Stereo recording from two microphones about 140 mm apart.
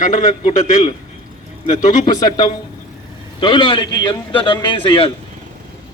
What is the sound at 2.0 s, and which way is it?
A man's voice, 30° left (ahead or behind).